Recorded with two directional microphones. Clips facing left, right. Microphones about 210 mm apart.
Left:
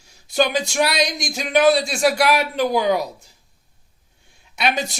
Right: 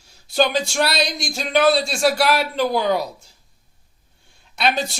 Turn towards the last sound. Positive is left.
turn(degrees=15)  # may be behind; listen again after turning